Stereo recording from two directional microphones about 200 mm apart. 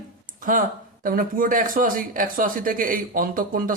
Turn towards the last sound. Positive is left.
turn(degrees=-45)  # may be behind; listen again after turning